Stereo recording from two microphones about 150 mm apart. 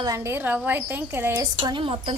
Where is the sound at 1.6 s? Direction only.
35° right (ahead or behind).